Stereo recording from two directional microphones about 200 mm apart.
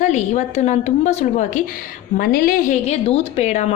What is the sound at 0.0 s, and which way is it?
A woman's voice, 35° left (ahead or behind).